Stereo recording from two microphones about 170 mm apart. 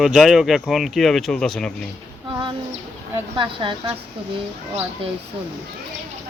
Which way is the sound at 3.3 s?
30° right (ahead or behind).